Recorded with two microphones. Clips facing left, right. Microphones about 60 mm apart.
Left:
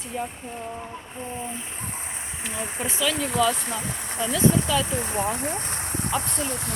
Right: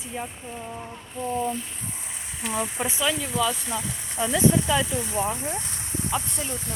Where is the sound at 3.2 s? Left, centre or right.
Left.